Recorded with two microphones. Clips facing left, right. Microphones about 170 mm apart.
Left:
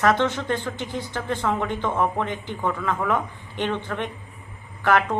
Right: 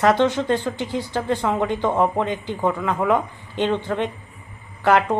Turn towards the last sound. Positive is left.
turn(degrees=-15)  # may be behind; listen again after turning